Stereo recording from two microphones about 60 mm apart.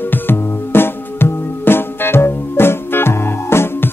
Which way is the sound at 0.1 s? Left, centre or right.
Left.